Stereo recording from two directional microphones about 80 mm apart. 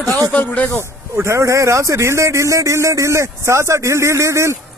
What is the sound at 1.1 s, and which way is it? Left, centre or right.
Speech, right.